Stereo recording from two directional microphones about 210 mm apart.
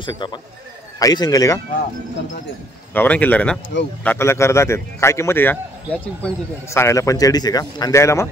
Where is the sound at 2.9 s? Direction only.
5° left (ahead or behind).